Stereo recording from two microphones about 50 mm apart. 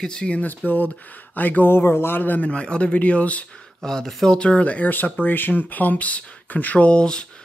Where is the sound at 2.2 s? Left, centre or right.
Left.